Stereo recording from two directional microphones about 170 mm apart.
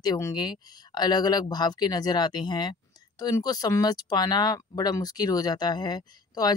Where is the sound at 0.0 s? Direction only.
25° left (ahead or behind).